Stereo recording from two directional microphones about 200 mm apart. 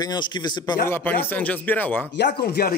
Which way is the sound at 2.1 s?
55° left (ahead or behind).